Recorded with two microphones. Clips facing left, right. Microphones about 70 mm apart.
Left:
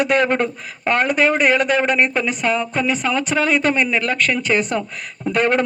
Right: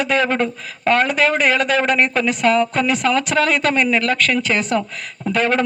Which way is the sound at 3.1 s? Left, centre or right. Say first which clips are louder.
Right 2 dB; centre.